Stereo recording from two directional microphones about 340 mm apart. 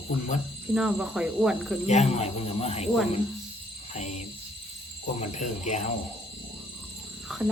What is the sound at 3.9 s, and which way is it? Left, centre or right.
Speech, centre.